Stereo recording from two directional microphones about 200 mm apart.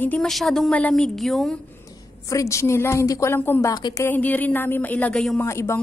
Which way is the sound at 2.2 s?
15° left (ahead or behind).